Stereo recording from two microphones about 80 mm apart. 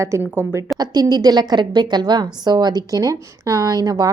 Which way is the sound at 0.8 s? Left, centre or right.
Right.